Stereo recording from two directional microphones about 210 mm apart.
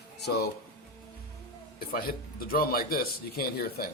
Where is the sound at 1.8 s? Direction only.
45° left (ahead or behind).